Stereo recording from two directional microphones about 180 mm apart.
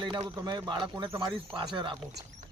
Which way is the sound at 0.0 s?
25° right (ahead or behind).